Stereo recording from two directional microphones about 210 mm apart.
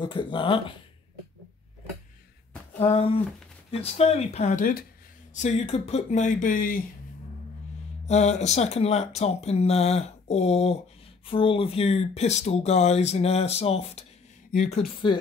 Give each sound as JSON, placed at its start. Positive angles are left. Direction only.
{"t": 0.0, "sound": "speech", "side_deg": 25}
{"t": 2.8, "sound": "speech", "side_deg": 25}
{"t": 8.1, "sound": "speech", "side_deg": 30}
{"t": 14.5, "sound": "speech", "side_deg": 40}
{"t": 15.0, "sound": "speech", "side_deg": 20}